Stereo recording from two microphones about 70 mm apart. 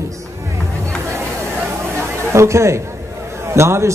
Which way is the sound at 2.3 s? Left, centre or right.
Right.